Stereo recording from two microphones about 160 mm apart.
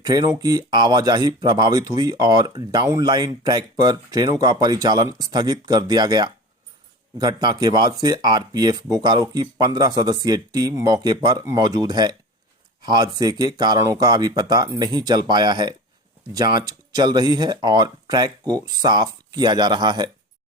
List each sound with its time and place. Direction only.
0.0 s speech: 25° right (ahead or behind)